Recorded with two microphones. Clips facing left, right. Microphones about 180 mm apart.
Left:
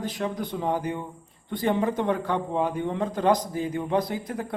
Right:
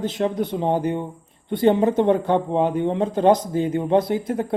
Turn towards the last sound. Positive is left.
turn(degrees=-25)  # may be behind; listen again after turning